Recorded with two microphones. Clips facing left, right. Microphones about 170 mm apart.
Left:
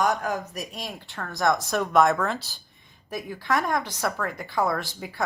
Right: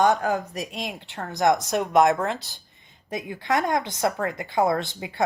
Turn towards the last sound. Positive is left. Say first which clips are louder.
# right 4 dB
turn(degrees=-20)  # may be behind; listen again after turning